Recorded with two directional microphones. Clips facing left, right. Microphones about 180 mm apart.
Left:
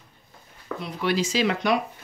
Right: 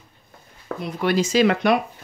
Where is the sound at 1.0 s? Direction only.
45° right (ahead or behind).